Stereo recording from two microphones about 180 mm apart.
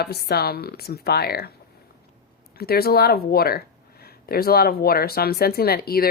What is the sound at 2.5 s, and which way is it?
Speech, 60° left (ahead or behind).